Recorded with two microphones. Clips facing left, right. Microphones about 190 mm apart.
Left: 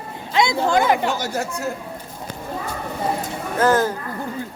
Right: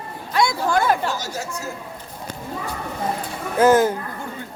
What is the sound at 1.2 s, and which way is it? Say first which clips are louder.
Speech: left 5 dB; 55° left (ahead or behind).